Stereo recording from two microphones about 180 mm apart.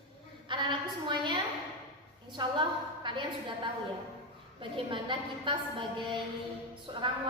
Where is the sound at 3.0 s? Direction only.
25° right (ahead or behind).